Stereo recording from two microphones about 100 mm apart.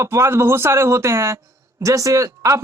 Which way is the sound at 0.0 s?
30° right (ahead or behind).